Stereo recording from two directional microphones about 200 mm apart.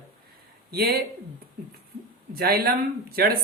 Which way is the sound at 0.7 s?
50° right (ahead or behind).